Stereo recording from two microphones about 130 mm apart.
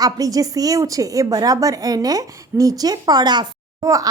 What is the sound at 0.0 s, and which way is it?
A woman's voice, 30° right (ahead or behind).